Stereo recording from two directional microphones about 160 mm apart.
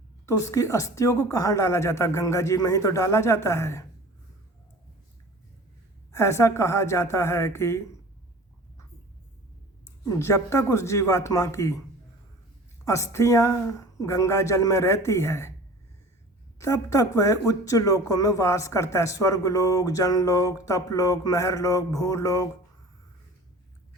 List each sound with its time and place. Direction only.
0.3 s speech: 20° left (ahead or behind)
6.1 s a woman's voice: 15° left (ahead or behind)
10.1 s a woman's voice: 15° left (ahead or behind)
12.8 s a woman's voice: 20° left (ahead or behind)
16.6 s speech: 20° left (ahead or behind)